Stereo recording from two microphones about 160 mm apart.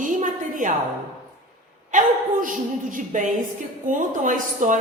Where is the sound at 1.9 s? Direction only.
55° right (ahead or behind).